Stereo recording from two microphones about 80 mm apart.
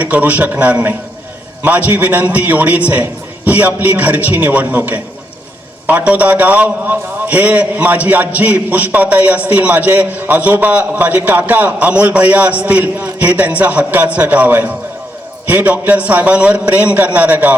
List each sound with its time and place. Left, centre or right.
0.0 s a man's voice: centre